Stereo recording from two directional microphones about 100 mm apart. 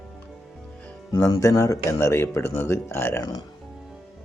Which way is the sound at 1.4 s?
35° left (ahead or behind).